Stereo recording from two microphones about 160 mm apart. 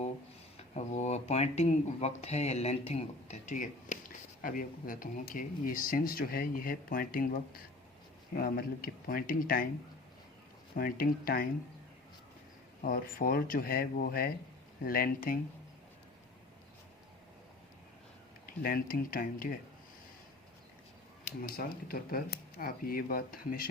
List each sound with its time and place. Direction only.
0.5 s speech: 45° left (ahead or behind); by 9.6 s 60° left (ahead or behind)
10.8 s speech: 65° left (ahead or behind)
12.8 s speech: 60° left (ahead or behind)
18.4 s speech: 60° left (ahead or behind)
21.4 s speech: 65° left (ahead or behind)